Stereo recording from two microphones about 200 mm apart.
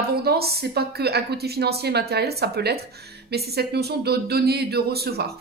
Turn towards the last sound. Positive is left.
turn(degrees=-50)  # may be behind; listen again after turning